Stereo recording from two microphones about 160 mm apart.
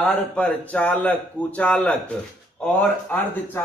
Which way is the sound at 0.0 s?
10° left (ahead or behind).